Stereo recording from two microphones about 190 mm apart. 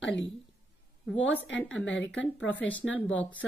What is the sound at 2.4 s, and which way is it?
Speech, 10° left (ahead or behind).